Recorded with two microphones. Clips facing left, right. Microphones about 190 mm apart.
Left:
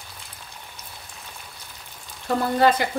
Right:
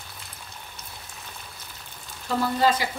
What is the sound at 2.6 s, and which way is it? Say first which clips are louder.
Speech: left 4 dB; 55° left (ahead or behind).